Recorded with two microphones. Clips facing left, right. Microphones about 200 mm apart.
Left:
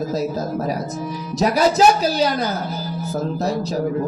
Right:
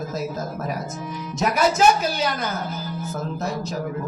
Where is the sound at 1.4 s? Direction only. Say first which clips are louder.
Left 4 dB; 35° left (ahead or behind).